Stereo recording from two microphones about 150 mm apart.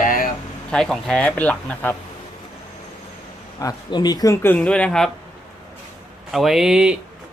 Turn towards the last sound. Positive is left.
turn(degrees=-5)  # may be behind; listen again after turning